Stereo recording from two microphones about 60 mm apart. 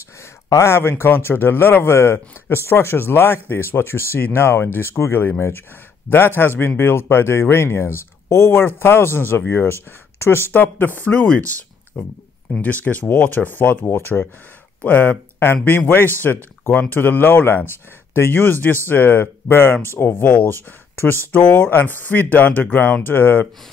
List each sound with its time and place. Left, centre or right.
0.5 s speech: left
14.8 s speech: left
20.2 s speech: left
20.9 s speech: left